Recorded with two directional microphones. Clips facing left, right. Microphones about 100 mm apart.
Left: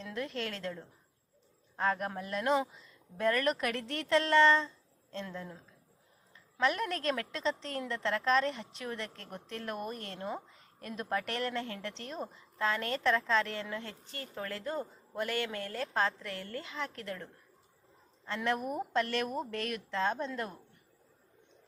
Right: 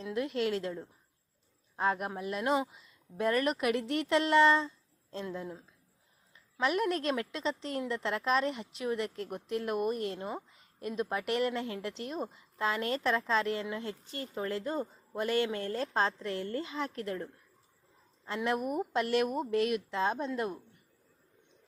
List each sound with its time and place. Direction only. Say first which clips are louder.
0.0 s speech: right 6 dB; 10° right (ahead or behind)
6.6 s a woman's voice: right 2 dB; 5° right (ahead or behind)
12.5 s a woman's voice: right 1 dB; 20° right (ahead or behind)
18.3 s speech: right 1 dB; 5° right (ahead or behind)